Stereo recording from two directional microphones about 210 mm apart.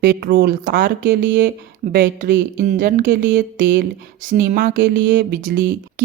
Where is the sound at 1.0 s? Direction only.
60° right (ahead or behind).